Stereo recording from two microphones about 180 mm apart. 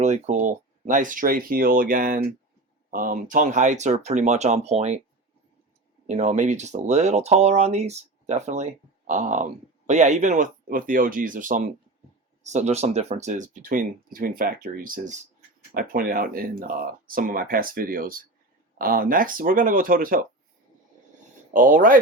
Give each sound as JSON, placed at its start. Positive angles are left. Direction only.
{"t": 0.0, "sound": "speech", "side_deg": -40}
{"t": 6.1, "sound": "speech", "side_deg": -40}
{"t": 21.5, "sound": "speech", "side_deg": -50}